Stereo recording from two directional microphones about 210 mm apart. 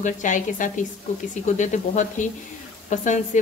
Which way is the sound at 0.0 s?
35° left (ahead or behind).